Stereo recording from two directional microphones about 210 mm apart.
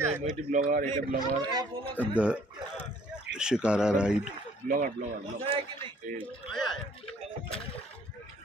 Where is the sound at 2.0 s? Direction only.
5° right (ahead or behind).